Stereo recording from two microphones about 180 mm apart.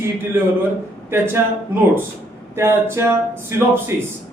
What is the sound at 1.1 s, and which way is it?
A man's voice, 10° right (ahead or behind).